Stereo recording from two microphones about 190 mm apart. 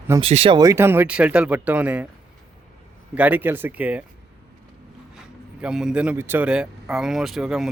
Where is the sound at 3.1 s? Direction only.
10° right (ahead or behind).